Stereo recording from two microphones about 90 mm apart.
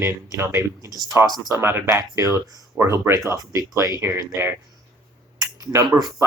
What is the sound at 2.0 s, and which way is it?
Speech, 40° right (ahead or behind).